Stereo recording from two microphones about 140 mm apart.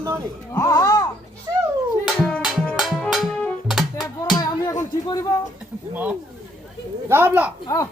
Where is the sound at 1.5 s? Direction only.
20° right (ahead or behind).